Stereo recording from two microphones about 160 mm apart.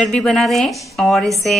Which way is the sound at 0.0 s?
5° left (ahead or behind).